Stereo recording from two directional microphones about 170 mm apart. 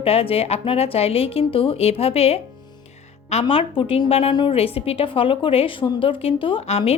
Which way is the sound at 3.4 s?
30° left (ahead or behind).